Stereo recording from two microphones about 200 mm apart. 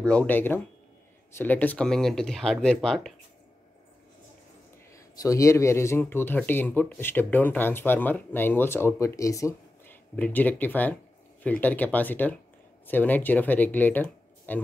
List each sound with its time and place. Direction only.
0.0 s speech: 5° left (ahead or behind)
4.9 s speech: 15° left (ahead or behind)